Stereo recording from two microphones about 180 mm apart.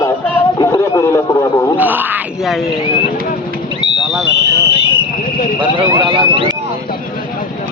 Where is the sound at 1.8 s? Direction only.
10° right (ahead or behind).